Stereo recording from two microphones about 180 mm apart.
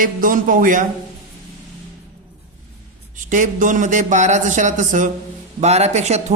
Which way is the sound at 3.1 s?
45° right (ahead or behind).